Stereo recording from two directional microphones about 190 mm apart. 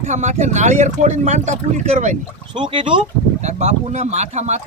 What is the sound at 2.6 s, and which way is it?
Speech, 25° right (ahead or behind).